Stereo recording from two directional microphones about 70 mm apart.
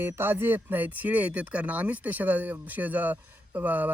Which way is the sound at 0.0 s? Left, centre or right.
Right.